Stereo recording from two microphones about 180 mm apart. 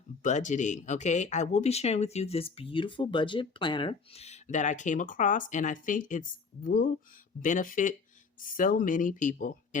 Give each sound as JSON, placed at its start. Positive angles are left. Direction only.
{"t": 0.2, "sound": "speech", "side_deg": 45}